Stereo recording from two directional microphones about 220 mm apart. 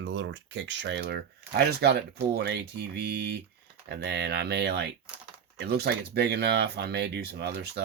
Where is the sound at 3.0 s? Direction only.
45° right (ahead or behind).